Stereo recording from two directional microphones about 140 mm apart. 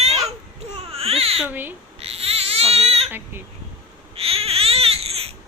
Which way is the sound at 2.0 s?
45° right (ahead or behind).